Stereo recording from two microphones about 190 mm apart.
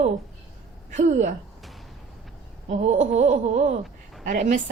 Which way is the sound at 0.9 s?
40° right (ahead or behind).